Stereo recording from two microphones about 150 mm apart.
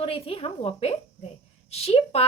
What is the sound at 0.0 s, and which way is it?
Speech, 40° left (ahead or behind).